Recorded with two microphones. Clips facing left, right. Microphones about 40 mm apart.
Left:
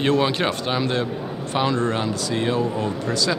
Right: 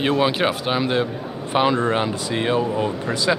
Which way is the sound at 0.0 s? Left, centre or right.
Centre.